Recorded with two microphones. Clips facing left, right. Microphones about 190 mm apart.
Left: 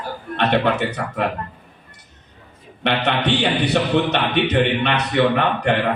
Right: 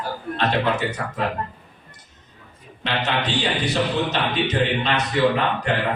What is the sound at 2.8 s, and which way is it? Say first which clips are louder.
A man's voice: left 4 dB; 65° left (ahead or behind).